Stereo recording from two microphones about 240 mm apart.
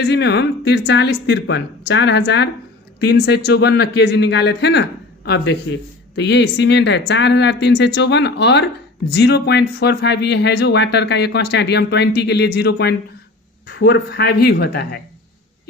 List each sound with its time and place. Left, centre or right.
0.0 s speech: left